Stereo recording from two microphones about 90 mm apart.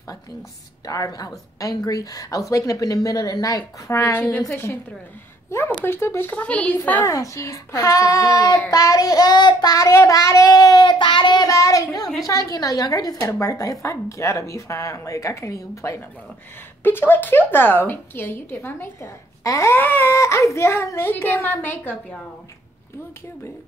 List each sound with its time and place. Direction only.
0.0 s a woman's voice: 35° left (ahead or behind)
6.4 s a woman's voice: 15° left (ahead or behind)
7.1 s a woman's voice: 35° left (ahead or behind)
10.8 s child singing: 60° left (ahead or behind)
11.4 s a woman's voice: 40° left (ahead or behind)
16.8 s a woman's voice: 25° left (ahead or behind)
19.8 s a woman's voice: 20° left (ahead or behind)